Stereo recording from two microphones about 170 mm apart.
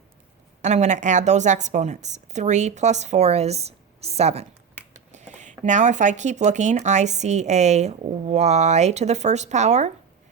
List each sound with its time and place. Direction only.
0.6 s speech: 45° right (ahead or behind)